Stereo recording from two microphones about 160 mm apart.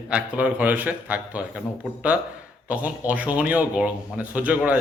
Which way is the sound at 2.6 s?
10° right (ahead or behind).